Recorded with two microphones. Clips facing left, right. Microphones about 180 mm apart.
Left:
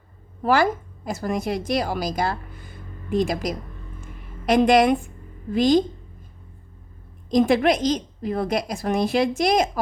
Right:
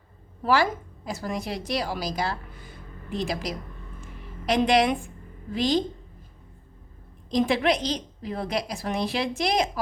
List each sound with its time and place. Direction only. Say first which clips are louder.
0.4 s a woman's voice: left 3 dB; 50° left (ahead or behind)
7.3 s a woman's voice: left 5 dB; 50° left (ahead or behind)